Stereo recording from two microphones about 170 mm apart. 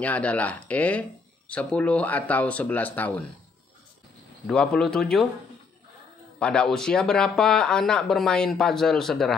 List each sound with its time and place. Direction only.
0.0 s speech: 10° left (ahead or behind)
4.5 s speech: 5° left (ahead or behind)
6.4 s speech: 5° left (ahead or behind)